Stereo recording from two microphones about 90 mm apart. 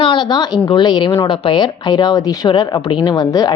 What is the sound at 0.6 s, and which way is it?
A woman's voice, 60° left (ahead or behind).